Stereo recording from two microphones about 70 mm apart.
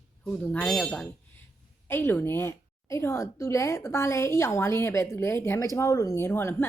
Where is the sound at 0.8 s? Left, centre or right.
Centre.